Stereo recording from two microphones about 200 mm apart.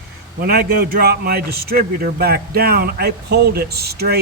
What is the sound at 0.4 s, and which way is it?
A man's voice, 50° right (ahead or behind).